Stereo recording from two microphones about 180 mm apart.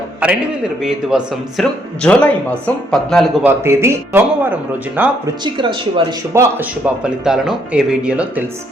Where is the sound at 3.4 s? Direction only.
15° right (ahead or behind).